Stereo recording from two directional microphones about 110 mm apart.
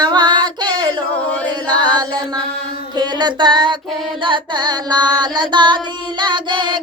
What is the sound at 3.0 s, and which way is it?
Female singing, 40° right (ahead or behind).